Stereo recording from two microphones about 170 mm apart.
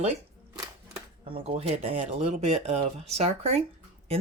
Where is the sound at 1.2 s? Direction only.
35° right (ahead or behind).